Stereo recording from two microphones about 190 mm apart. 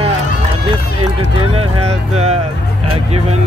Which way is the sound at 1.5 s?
35° right (ahead or behind).